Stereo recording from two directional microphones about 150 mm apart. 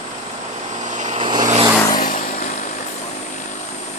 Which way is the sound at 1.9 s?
65° left (ahead or behind).